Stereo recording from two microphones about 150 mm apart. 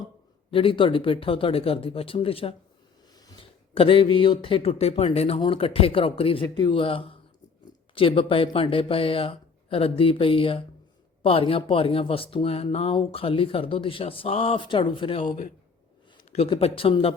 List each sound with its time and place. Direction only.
0.5 s speech: 35° left (ahead or behind)
3.2 s a sound: 25° left (ahead or behind)
3.8 s speech: 35° left (ahead or behind)
16.3 s speech: 45° left (ahead or behind)